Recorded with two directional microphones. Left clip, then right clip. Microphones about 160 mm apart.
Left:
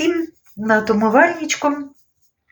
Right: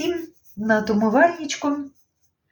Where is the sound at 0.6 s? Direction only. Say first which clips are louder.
Left 4 dB; 15° right (ahead or behind).